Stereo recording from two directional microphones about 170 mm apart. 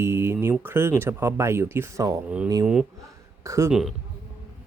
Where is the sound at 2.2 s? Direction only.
5° right (ahead or behind).